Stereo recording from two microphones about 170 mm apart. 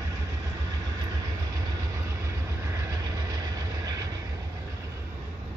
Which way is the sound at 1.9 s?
15° right (ahead or behind).